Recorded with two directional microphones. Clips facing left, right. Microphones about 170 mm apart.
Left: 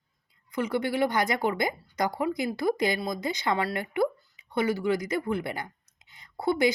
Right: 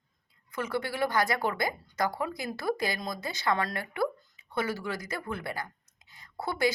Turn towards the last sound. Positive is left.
turn(degrees=15)  # may be behind; listen again after turning